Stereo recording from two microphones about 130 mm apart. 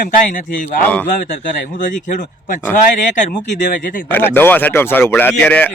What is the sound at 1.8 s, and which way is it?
Speech, 85° left.